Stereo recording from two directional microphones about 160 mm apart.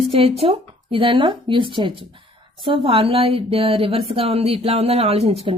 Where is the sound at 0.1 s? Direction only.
35° right (ahead or behind).